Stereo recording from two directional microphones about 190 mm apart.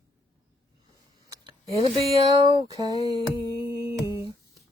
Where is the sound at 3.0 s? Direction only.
25° left (ahead or behind).